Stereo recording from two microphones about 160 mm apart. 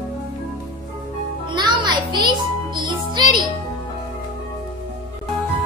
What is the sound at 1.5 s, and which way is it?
Music, 25° right (ahead or behind).